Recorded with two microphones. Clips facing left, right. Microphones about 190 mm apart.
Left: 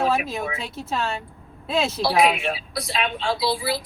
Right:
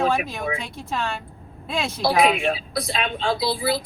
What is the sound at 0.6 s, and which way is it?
Speech, centre (ahead or behind).